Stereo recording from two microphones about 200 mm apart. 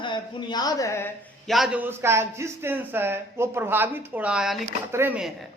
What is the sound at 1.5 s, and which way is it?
A man's voice, centre (ahead or behind).